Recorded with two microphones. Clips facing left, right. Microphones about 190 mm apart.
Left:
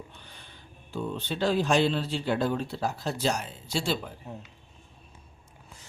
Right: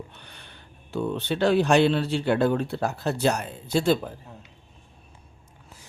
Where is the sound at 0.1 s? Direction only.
70° right (ahead or behind).